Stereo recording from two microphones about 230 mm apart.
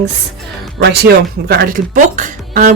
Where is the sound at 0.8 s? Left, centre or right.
Right.